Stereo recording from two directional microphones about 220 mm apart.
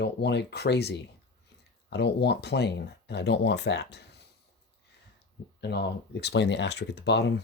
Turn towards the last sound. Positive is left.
turn(degrees=50)  # may be behind; listen again after turning